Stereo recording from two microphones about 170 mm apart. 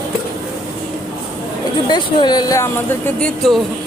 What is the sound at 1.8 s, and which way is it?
Speech, 25° left (ahead or behind).